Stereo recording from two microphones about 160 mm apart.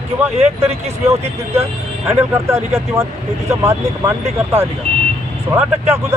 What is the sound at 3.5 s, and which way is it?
Speech, 20° right (ahead or behind).